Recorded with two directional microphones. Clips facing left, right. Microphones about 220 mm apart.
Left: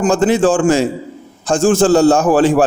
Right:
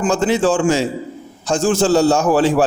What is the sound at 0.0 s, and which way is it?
A man's voice, 50° left (ahead or behind).